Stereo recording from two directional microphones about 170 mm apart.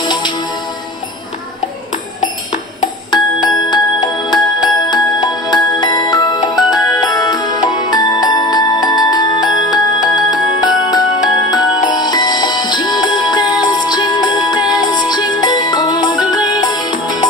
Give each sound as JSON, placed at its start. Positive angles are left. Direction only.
{"t": 0.0, "sound": "music", "side_deg": 25}
{"t": 3.1, "sound": "music", "side_deg": 25}